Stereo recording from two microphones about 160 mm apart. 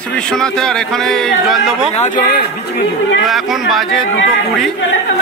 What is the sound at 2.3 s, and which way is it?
Speech, 70° left (ahead or behind).